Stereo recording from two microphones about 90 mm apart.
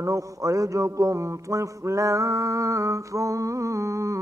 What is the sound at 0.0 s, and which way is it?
A man's voice, 40° right (ahead or behind).